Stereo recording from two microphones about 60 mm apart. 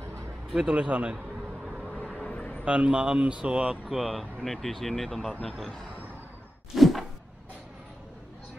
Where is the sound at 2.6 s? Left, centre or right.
Centre.